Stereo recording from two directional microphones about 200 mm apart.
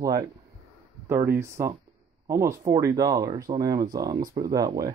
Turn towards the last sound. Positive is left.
turn(degrees=-20)  # may be behind; listen again after turning